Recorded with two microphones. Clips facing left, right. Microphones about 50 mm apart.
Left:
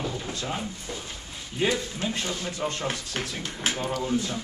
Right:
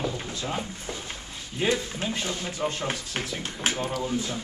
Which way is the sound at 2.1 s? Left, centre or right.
Centre.